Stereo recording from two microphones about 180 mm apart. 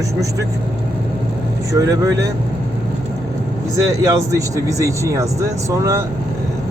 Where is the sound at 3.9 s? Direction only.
20° right (ahead or behind).